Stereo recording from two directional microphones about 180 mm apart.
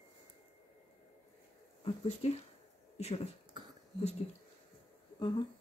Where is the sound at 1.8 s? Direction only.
35° left (ahead or behind).